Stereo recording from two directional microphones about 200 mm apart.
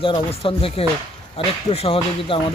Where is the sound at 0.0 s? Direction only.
25° left (ahead or behind).